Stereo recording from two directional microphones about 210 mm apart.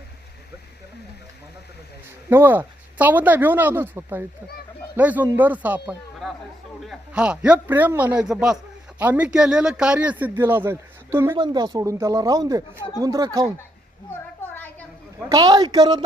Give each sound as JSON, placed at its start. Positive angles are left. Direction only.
{"t": 2.3, "sound": "a man's voice", "side_deg": -10}
{"t": 14.4, "sound": "a sound", "side_deg": 10}
{"t": 15.3, "sound": "a woman's voice", "side_deg": -20}